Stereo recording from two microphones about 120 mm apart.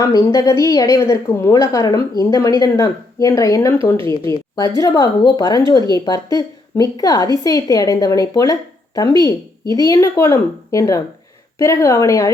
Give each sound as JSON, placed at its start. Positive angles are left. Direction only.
{"t": 0.0, "sound": "a woman's voice", "side_deg": 25}